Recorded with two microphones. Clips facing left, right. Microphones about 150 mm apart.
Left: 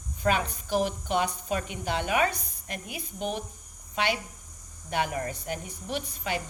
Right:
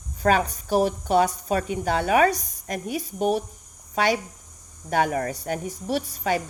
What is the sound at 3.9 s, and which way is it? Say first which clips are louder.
A woman's voice: right 6 dB; 40° right (ahead or behind).